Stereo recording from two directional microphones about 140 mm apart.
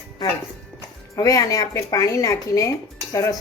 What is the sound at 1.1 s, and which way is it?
A woman's voice, 25° left (ahead or behind).